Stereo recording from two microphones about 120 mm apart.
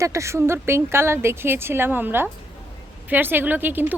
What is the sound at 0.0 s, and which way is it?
A woman's voice, 25° right (ahead or behind).